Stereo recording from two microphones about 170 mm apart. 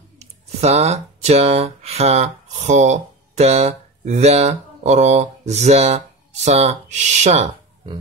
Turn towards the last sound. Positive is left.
turn(degrees=-45)  # may be behind; listen again after turning